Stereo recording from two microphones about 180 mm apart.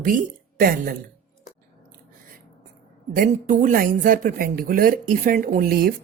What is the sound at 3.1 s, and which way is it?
Speech, 50° right (ahead or behind).